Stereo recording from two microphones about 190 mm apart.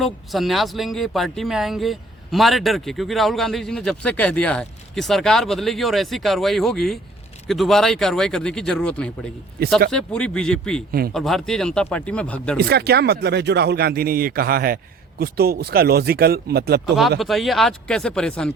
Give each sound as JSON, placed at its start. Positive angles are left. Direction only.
{"t": 0.0, "sound": "speech", "side_deg": 0}
{"t": 12.5, "sound": "speech", "side_deg": -55}
{"t": 17.2, "sound": "speech", "side_deg": 0}